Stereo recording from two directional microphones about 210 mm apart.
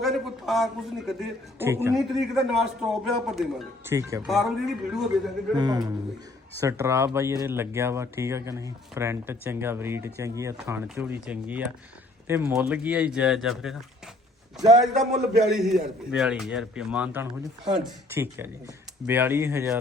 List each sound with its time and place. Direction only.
0.0 s a man's voice: centre (ahead or behind)
1.5 s speech: 10° right (ahead or behind)
2.0 s a man's voice: centre (ahead or behind)
3.9 s speech: 15° right (ahead or behind)
4.3 s a man's voice: centre (ahead or behind)
5.5 s a man's voice: 20° right (ahead or behind); by 13.7 s centre (ahead or behind)
15.1 s a man's voice: centre (ahead or behind)